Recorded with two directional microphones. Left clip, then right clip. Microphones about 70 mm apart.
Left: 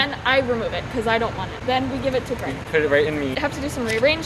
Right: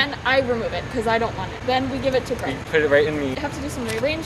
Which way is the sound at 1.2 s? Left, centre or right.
Centre.